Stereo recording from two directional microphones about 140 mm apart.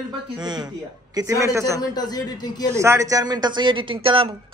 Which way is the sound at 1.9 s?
30° left (ahead or behind).